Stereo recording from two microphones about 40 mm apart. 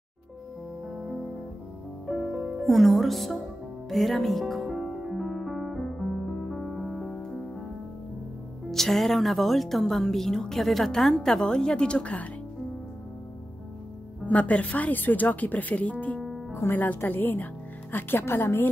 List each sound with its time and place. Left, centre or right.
0.8 s music: centre
6.8 s music: centre
7.1 s music: centre
8.7 s a woman's voice: centre; by 12.3 s left
14.2 s speech: left
15.0 s speech: left
16.6 s speech: left
17.1 s speech: left
17.9 s speech: left